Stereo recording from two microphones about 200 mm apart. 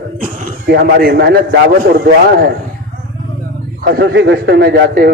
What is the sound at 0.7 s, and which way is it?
Speech, 45° right (ahead or behind).